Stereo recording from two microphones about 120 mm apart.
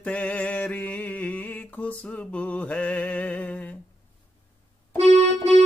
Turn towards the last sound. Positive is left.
turn(degrees=-60)  # may be behind; listen again after turning